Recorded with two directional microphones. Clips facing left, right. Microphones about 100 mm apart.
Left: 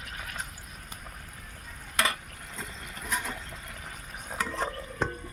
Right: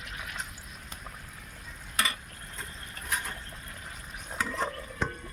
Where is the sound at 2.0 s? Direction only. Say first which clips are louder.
Left 3 dB; 90° left.